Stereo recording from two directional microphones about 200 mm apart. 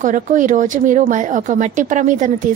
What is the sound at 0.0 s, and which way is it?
Speech, 40° right (ahead or behind).